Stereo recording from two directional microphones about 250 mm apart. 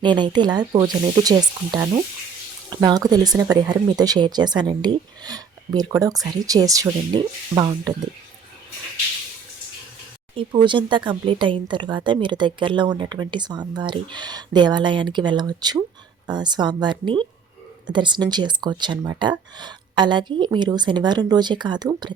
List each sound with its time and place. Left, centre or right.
0.0 s speech: centre
10.3 s speech: centre